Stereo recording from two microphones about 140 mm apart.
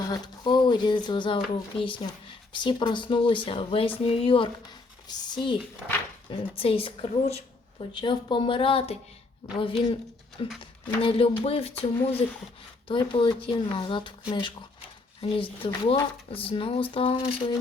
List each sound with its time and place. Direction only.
0.1 s speech: 35° left (ahead or behind)
6.6 s speech: 40° left (ahead or behind)